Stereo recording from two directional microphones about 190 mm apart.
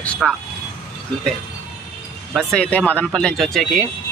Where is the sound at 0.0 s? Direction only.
5° left (ahead or behind).